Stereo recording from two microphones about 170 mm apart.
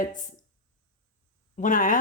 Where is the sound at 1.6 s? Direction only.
50° left (ahead or behind).